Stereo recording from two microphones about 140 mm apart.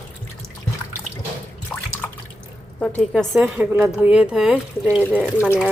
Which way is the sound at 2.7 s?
10° left (ahead or behind).